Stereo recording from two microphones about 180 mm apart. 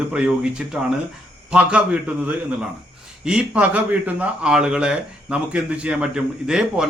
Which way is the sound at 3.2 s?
5° right (ahead or behind).